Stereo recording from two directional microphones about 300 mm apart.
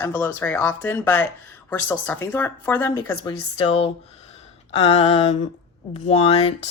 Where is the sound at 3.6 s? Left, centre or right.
Centre.